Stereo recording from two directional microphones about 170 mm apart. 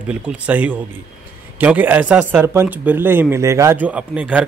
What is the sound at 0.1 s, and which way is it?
A man's voice, 10° right (ahead or behind).